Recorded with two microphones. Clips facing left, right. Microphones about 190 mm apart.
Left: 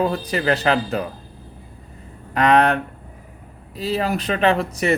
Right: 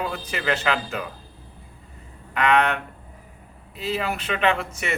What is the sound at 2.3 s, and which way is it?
A man's voice, 35° left (ahead or behind).